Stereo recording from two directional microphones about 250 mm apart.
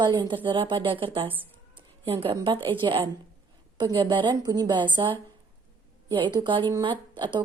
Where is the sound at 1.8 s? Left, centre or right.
Right.